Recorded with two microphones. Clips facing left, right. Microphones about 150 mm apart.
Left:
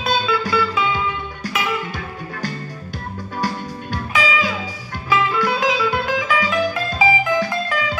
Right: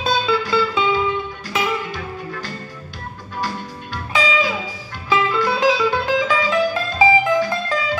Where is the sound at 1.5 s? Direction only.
30° right (ahead or behind).